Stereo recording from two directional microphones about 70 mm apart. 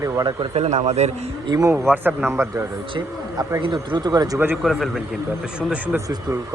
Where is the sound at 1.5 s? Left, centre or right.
Right.